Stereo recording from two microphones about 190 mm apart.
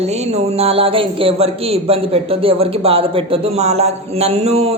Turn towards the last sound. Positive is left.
turn(degrees=-35)  # may be behind; listen again after turning